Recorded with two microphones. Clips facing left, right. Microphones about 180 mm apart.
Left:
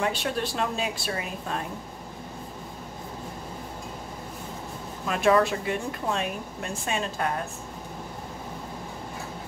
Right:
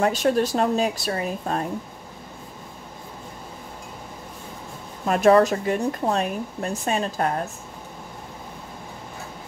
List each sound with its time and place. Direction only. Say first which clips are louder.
0.0 s speech: right 7 dB; 40° right (ahead or behind)
5.0 s speech: right 6 dB; 40° right (ahead or behind)